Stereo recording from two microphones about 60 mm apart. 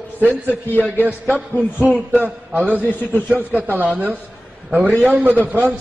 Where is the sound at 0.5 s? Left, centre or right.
Left.